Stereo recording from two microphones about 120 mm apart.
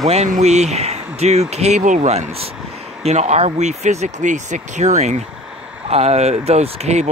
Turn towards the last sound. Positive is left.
turn(degrees=-65)  # may be behind; listen again after turning